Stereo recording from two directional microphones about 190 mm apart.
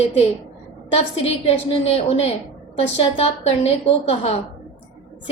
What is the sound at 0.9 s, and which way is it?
A woman's voice, 30° left (ahead or behind).